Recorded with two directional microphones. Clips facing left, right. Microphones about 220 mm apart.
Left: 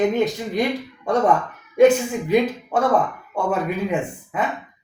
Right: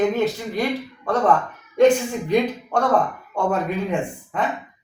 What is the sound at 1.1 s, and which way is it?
Speech, 15° left (ahead or behind).